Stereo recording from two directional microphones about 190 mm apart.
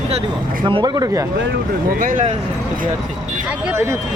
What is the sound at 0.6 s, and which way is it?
Speech, 25° right (ahead or behind).